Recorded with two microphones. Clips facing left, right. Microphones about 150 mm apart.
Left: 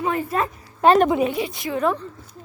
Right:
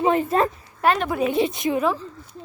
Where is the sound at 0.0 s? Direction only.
25° right (ahead or behind).